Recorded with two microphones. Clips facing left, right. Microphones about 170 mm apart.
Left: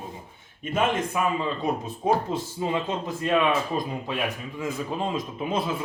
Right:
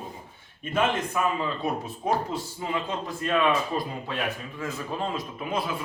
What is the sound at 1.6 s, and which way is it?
Speech, 20° left (ahead or behind).